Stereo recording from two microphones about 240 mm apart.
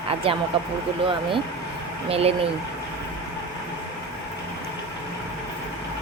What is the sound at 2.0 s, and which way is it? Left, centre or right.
Speech, right.